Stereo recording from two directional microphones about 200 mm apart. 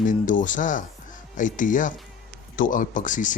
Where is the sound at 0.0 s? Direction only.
40° left (ahead or behind).